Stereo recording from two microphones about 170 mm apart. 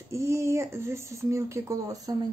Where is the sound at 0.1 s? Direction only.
15° right (ahead or behind).